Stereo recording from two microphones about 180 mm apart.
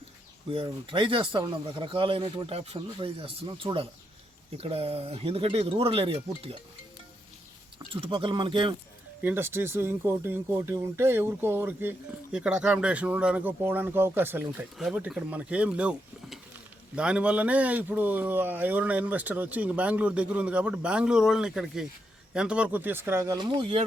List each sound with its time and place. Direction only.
0.5 s speech: 30° right (ahead or behind)
7.9 s speech: 30° right (ahead or behind)
9.2 s speech: 10° right (ahead or behind); by 23.8 s 30° right (ahead or behind)